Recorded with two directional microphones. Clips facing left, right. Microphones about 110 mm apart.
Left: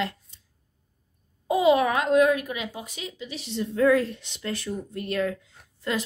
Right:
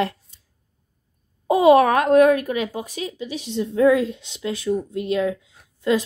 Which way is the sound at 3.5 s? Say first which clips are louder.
Right 4 dB; 15° right (ahead or behind).